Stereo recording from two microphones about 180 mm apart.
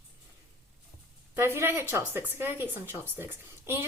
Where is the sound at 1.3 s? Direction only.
15° right (ahead or behind).